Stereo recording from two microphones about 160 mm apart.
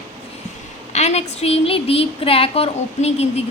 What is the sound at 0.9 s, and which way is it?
A woman's voice, 45° left (ahead or behind).